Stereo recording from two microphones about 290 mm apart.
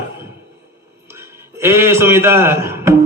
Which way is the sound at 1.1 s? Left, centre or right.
Centre.